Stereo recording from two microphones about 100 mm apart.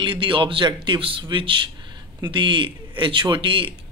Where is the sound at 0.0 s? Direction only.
55° right (ahead or behind).